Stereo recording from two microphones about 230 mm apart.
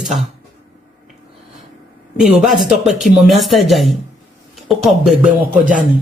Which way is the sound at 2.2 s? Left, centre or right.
Centre.